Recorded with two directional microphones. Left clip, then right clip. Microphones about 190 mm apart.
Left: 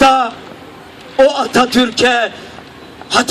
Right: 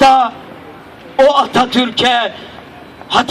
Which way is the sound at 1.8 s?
25° left (ahead or behind).